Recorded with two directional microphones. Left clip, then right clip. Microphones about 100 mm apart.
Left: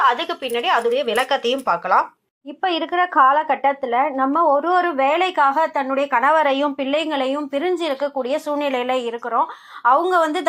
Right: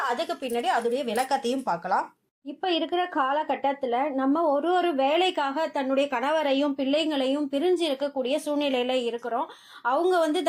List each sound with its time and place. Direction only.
0.2 s speech: 20° right (ahead or behind)
0.9 s a woman's voice: 10° right (ahead or behind)